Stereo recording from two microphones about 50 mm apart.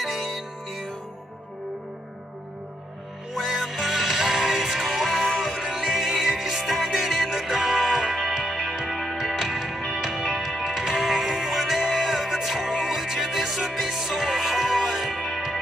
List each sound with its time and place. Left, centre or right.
3.6 s music: centre